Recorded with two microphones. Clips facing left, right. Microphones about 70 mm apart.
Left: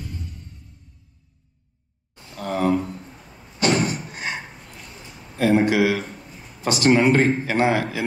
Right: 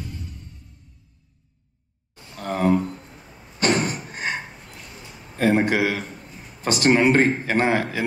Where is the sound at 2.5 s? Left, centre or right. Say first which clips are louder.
Right 1 dB; right.